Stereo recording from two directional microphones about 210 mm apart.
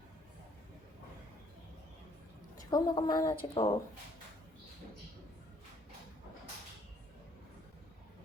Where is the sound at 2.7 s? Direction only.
20° left (ahead or behind).